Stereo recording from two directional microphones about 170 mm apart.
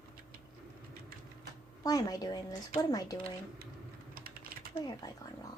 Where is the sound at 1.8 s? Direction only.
20° left (ahead or behind).